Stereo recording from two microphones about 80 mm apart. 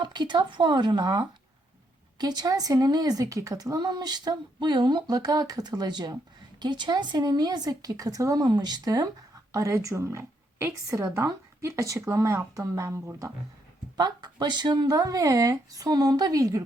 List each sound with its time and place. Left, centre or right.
0.0 s speech: right
8.4 s speech: right
9.5 s a woman's voice: right
13.9 s speech: right